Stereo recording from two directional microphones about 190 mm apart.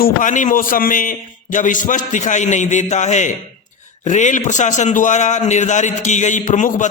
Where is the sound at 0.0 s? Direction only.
40° left (ahead or behind).